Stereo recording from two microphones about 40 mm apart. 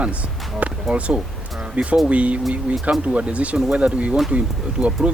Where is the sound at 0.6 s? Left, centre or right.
Right.